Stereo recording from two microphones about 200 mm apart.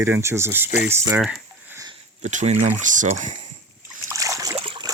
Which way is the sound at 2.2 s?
35° right (ahead or behind).